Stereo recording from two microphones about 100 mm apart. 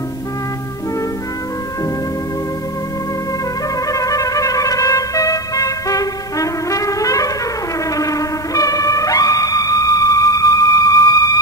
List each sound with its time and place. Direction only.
3.8 s music: 35° left (ahead or behind)